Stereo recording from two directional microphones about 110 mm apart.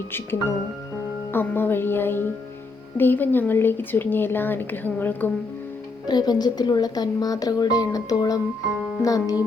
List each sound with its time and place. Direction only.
0.1 s speech: 20° left (ahead or behind)
6.1 s speech: 40° left (ahead or behind)